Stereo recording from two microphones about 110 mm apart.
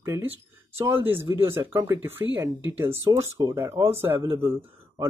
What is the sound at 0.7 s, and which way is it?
Speech, 20° right (ahead or behind).